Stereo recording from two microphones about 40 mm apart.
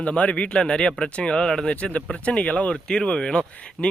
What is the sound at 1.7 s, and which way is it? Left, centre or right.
Speech, left.